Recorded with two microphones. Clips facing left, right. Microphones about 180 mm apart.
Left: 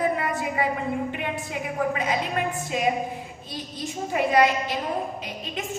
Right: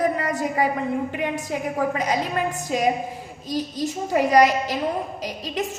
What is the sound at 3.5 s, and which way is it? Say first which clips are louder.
A woman's voice: right 7 dB; 40° right (ahead or behind).